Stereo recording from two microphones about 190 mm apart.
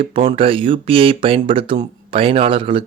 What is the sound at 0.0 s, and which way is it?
Speech, 30° right (ahead or behind).